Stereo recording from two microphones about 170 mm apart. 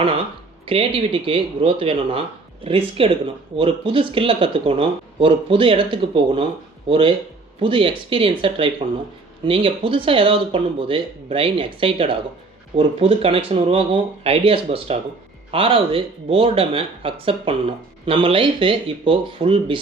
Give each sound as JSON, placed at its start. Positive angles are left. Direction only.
{"t": 0.7, "sound": "speech", "side_deg": -35}